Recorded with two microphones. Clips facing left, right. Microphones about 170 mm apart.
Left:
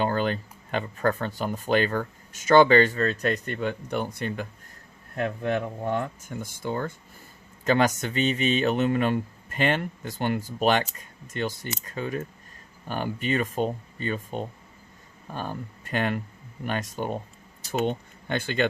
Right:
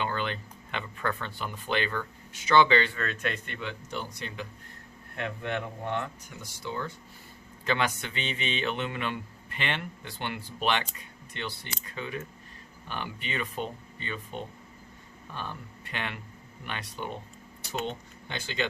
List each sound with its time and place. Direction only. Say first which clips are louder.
0.0 s speech: left 7 dB; 40° left (ahead or behind)
5.1 s speech: left 6 dB; 40° left (ahead or behind)